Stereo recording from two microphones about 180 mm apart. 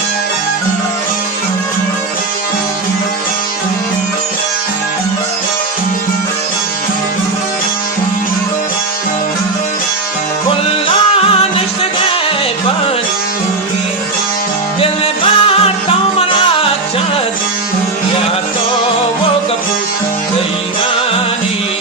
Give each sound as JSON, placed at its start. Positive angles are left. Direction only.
{"t": 14.8, "sound": "music", "side_deg": 30}